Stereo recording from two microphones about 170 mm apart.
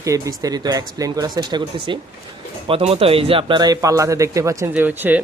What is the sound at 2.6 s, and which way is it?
A man's voice, 35° right (ahead or behind).